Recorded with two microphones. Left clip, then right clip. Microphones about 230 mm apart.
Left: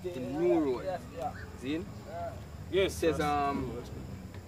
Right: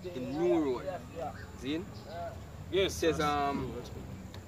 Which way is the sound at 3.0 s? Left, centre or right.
Centre.